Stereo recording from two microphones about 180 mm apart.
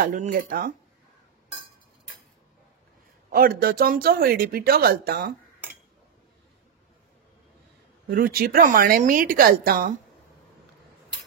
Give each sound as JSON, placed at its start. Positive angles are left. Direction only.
{"t": 0.0, "sound": "speech", "side_deg": -45}
{"t": 3.3, "sound": "speech", "side_deg": -55}
{"t": 8.1, "sound": "speech", "side_deg": -55}